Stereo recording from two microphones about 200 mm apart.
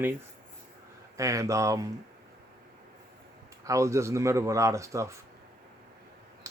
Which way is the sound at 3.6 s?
15° right (ahead or behind).